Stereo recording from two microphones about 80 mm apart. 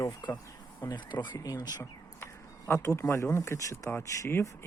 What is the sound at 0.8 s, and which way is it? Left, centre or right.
Speech, left.